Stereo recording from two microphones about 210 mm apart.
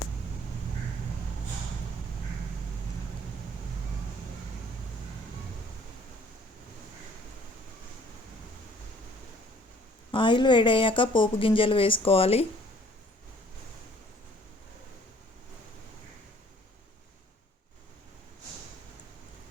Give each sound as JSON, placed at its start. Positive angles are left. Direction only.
{"t": 10.1, "sound": "a woman's voice", "side_deg": 20}